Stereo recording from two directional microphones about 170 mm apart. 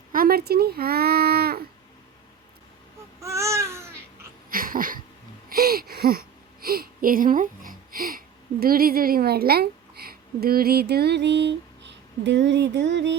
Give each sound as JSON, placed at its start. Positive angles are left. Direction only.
{"t": 0.1, "sound": "speech", "side_deg": -60}
{"t": 3.2, "sound": "babbling", "side_deg": -15}
{"t": 4.4, "sound": "a sound", "side_deg": -55}
{"t": 5.5, "sound": "gasp", "side_deg": -65}
{"t": 5.9, "sound": "a sound", "side_deg": -65}
{"t": 8.6, "sound": "a woman's voice", "side_deg": -60}